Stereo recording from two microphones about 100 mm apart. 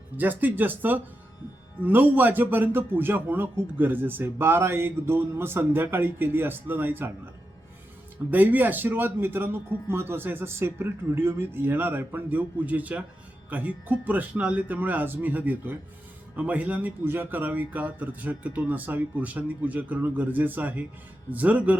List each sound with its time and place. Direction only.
0.2 s a man's voice: 20° right (ahead or behind)
8.3 s a man's voice: 15° right (ahead or behind)